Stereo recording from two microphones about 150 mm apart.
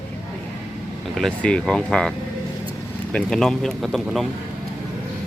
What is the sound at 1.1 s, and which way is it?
Speech, 5° left (ahead or behind).